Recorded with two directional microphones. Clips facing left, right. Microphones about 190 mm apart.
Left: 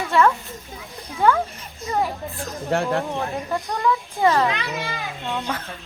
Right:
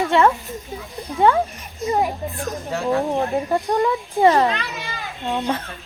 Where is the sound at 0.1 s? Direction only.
25° right (ahead or behind).